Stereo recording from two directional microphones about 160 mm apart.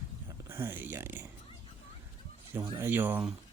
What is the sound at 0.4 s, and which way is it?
Speech, 15° right (ahead or behind).